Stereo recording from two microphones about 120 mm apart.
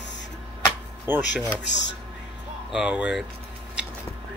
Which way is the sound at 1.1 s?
15° right (ahead or behind).